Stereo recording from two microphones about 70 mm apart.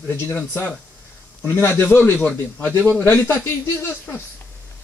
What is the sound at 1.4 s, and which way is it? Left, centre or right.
Speech, left.